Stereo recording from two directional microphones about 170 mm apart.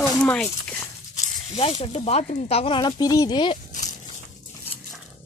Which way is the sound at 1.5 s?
35° left (ahead or behind).